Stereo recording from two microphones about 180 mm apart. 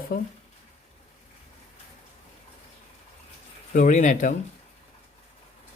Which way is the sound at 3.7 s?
45° left (ahead or behind).